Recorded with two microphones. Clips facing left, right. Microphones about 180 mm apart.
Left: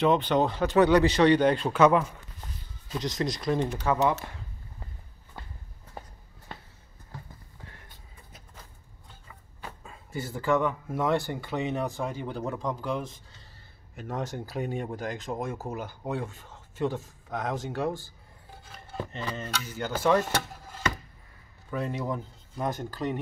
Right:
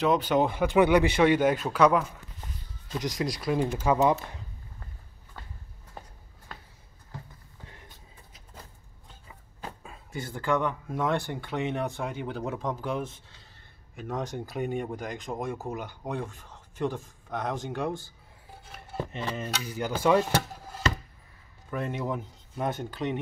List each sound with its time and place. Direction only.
0.0 s speech: 5° right (ahead or behind)
3.0 s speech: 10° right (ahead or behind)
3.9 s speech: 15° right (ahead or behind)
10.1 s speech: 5° left (ahead or behind)
17.3 s speech: 5° left (ahead or behind)
19.3 s speech: 10° right (ahead or behind)
21.6 s speech: centre (ahead or behind)